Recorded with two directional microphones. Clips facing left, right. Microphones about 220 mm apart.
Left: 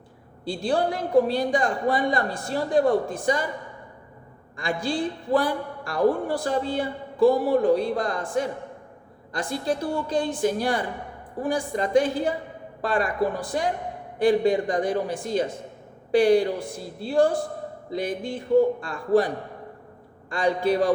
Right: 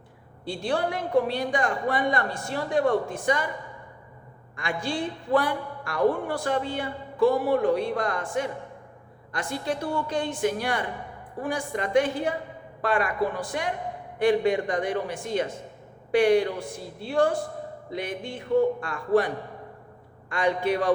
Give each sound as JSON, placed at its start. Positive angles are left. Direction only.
{"t": 0.4, "sound": "a man's voice", "side_deg": 35}
{"t": 4.5, "sound": "a man's voice", "side_deg": 35}
{"t": 20.3, "sound": "a man's voice", "side_deg": 35}